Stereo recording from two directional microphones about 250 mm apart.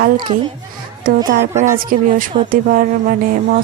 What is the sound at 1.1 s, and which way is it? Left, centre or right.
A woman's voice, right.